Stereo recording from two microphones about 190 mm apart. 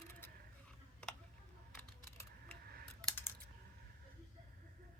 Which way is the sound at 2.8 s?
10° left (ahead or behind).